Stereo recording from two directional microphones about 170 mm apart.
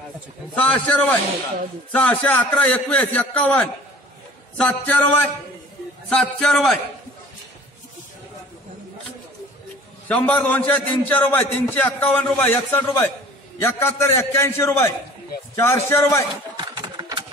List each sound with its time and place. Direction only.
0.6 s a man's voice: 5° left (ahead or behind)
10.0 s a man's voice: 10° left (ahead or behind)